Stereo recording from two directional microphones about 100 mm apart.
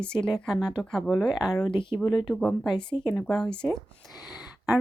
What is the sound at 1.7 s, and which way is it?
Speech, 55° left (ahead or behind).